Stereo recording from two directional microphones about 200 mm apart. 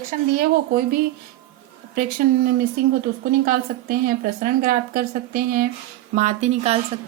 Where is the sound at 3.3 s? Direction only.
45° right (ahead or behind).